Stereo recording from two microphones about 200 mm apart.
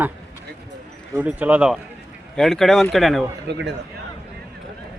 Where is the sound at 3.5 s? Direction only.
60° right (ahead or behind).